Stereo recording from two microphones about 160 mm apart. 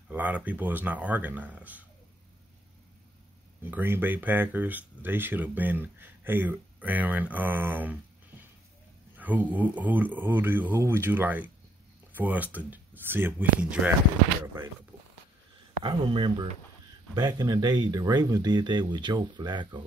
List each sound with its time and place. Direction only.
0.1 s speech: 10° right (ahead or behind)
3.6 s speech: 15° right (ahead or behind)
9.1 s speech: 10° right (ahead or behind)
15.8 s speech: 35° right (ahead or behind)